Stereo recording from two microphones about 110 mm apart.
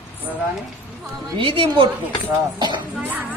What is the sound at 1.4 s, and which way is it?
Speech, 55° right (ahead or behind).